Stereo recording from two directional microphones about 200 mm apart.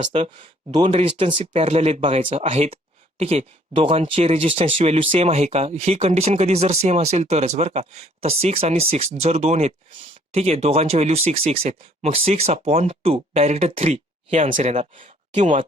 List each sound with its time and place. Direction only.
0.0 s speech: 30° right (ahead or behind)